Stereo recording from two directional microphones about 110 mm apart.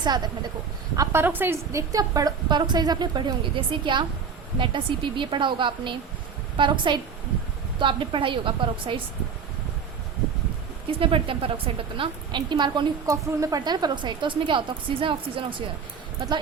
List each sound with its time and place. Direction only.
0.0 s a woman's voice: 40° right (ahead or behind)
0.9 s a woman's voice: 20° right (ahead or behind); by 9.0 s 50° right (ahead or behind)
11.0 s a woman's voice: 55° right (ahead or behind)
13.1 s a woman's voice: 35° right (ahead or behind); by 15.6 s 50° right (ahead or behind)